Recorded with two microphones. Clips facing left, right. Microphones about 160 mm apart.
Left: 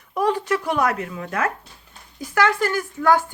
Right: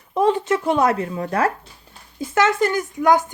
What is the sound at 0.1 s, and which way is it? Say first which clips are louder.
Speech: right 3 dB; 25° right (ahead or behind).